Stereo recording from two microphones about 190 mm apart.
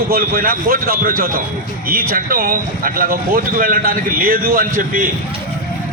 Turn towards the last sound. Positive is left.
turn(degrees=-45)  # may be behind; listen again after turning